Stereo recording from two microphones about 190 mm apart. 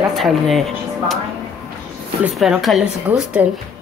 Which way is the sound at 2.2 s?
5° right (ahead or behind).